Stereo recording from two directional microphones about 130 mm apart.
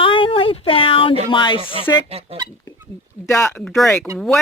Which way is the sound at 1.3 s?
40° left (ahead or behind).